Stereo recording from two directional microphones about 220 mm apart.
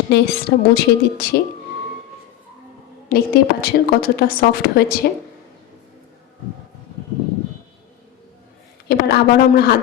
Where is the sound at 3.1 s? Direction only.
45° left (ahead or behind).